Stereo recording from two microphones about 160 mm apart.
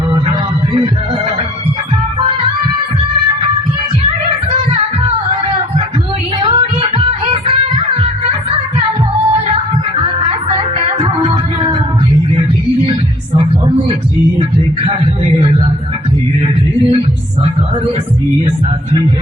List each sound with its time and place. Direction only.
6.4 s music: 35° right (ahead or behind)
10.0 s music: 35° right (ahead or behind)